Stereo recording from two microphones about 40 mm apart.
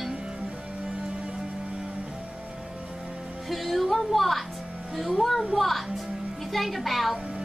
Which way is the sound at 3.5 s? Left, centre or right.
Centre.